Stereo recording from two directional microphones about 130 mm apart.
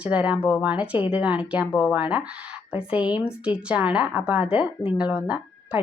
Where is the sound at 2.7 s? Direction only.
45° left (ahead or behind).